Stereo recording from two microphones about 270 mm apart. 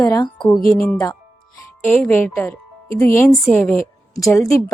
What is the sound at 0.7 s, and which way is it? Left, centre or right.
A woman's voice, centre.